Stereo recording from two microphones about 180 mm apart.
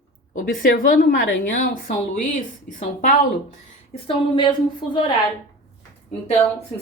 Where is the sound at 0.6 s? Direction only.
50° left (ahead or behind).